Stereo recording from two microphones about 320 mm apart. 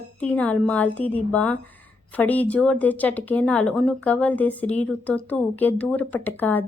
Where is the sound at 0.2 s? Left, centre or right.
Centre.